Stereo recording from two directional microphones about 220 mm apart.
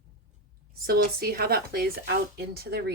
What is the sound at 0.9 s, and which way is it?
Speech, 45° right (ahead or behind).